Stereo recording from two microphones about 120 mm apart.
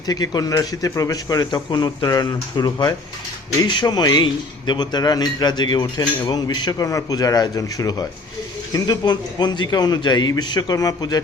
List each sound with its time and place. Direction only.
0.0 s a man's voice: 35° left (ahead or behind)